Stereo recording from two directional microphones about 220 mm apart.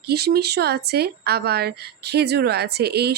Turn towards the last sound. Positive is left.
turn(degrees=-45)  # may be behind; listen again after turning